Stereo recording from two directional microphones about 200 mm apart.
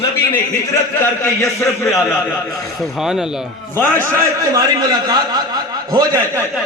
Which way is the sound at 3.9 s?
15° right (ahead or behind).